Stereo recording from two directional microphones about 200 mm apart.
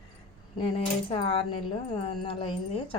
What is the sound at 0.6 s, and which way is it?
Speech, 25° left (ahead or behind).